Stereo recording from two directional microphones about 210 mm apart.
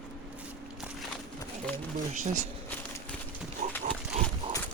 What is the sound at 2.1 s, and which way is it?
Speech, 40° right (ahead or behind).